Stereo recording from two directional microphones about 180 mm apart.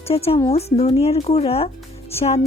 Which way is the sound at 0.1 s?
35° left (ahead or behind).